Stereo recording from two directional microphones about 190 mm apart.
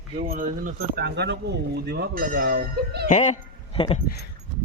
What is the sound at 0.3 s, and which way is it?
Speech, 45° right (ahead or behind).